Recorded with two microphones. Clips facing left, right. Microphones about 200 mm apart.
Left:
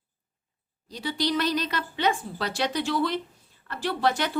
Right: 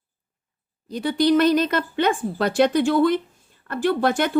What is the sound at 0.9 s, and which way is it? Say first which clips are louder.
A woman's voice: right 9 dB; 55° right (ahead or behind).